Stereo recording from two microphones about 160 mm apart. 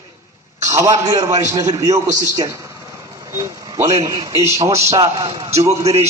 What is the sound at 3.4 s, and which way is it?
A man's voice, 20° right (ahead or behind).